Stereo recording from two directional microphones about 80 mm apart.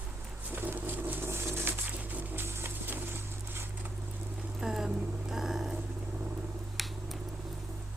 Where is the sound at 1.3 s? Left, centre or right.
Right.